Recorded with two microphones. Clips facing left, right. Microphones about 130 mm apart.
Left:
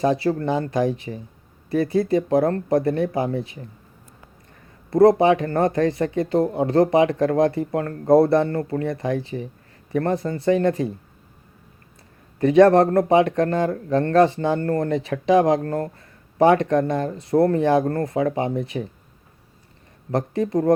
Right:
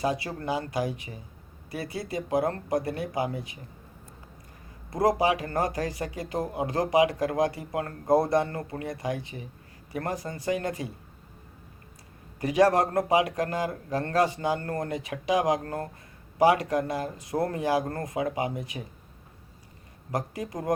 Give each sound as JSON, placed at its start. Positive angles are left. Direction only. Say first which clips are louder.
{"t": 0.0, "sound": "speech", "louder": "left 9 dB", "side_deg": 35}
{"t": 5.0, "sound": "speech", "louder": "left 8 dB", "side_deg": 30}
{"t": 13.0, "sound": "speech", "louder": "left 7 dB", "side_deg": 30}
{"t": 20.1, "sound": "speech", "louder": "left 9 dB", "side_deg": 30}